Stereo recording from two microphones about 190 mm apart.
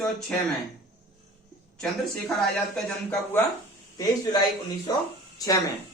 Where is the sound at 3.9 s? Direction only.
20° left (ahead or behind).